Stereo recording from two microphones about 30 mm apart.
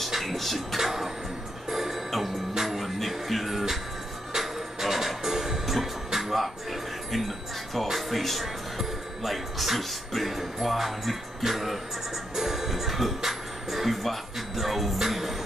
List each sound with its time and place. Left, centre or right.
0.2 s a sound: centre
0.7 s music: centre
2.0 s music: centre
6.1 s music: centre